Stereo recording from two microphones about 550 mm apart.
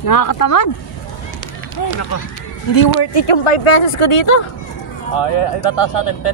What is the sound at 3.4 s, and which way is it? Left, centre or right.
Speech, left.